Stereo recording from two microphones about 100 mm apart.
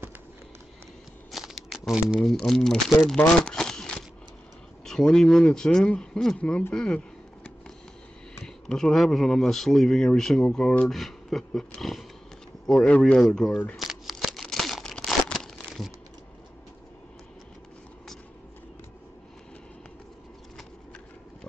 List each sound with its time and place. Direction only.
1.3 s a sound: centre (ahead or behind)
2.1 s speech: 5° left (ahead or behind)
3.2 s a sound: 10° left (ahead or behind)
4.8 s speech: 5° left (ahead or behind)
8.6 s speech: 5° left (ahead or behind)
13.8 s crumpling: centre (ahead or behind)